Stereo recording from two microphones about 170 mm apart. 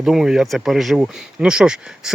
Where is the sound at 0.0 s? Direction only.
5° right (ahead or behind).